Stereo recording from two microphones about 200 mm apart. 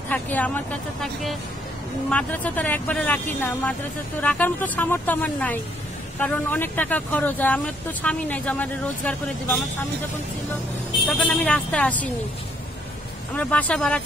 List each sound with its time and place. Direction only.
0.1 s speech: 10° left (ahead or behind)
2.0 s speech: 5° left (ahead or behind)
11.1 s speech: 5° left (ahead or behind)
13.4 s speech: 5° left (ahead or behind)